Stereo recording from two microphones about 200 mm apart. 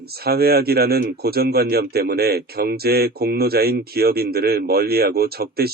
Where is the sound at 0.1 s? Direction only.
50° right (ahead or behind).